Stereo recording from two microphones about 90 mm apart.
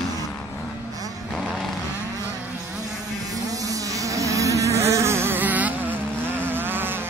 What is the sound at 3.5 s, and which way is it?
Insect, 40° right (ahead or behind).